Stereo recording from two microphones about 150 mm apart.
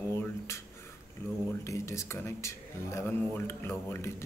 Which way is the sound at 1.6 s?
20° left (ahead or behind).